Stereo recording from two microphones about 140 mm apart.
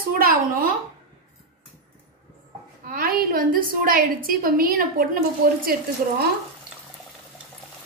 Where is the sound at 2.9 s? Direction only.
90° right.